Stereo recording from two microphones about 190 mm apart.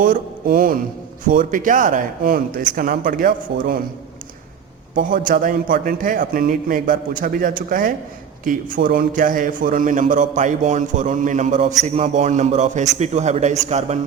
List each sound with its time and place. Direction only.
0.0 s a man's voice: 45° right (ahead or behind)
5.3 s a man's voice: 45° right (ahead or behind)